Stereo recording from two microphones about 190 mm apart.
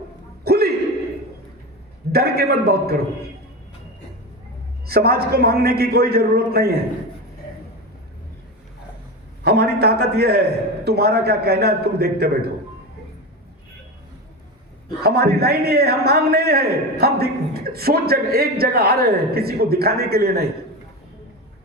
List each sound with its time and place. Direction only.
0.4 s a sound: 55° right (ahead or behind)
2.1 s a man's voice: 55° right (ahead or behind)
4.9 s a man's voice: 55° right (ahead or behind)
9.4 s a man's voice: 55° right (ahead or behind)
15.0 s a man's voice: 55° right (ahead or behind)